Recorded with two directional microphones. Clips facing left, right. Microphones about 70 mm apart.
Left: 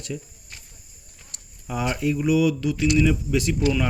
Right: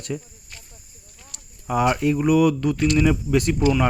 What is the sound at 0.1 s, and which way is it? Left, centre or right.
Speech, right.